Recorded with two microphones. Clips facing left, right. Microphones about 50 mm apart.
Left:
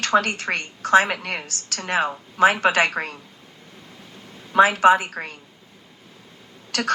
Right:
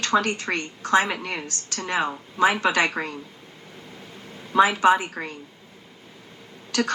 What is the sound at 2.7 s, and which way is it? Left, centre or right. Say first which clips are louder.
Speech: left 2 dB; left.